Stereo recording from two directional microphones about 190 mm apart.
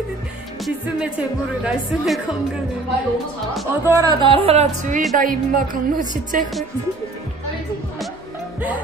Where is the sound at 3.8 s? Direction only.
15° right (ahead or behind); by 6.5 s 45° right (ahead or behind).